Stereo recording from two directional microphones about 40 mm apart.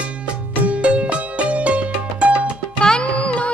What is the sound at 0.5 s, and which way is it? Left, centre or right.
Music, right.